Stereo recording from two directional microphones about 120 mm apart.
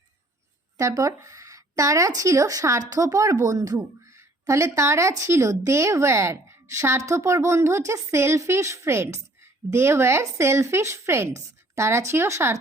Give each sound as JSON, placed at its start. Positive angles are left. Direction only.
{"t": 0.8, "sound": "speech", "side_deg": -30}